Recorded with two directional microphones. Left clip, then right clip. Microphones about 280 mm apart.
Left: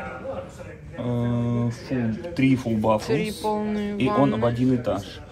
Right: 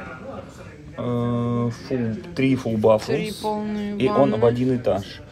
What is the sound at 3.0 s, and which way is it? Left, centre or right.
Speech, centre.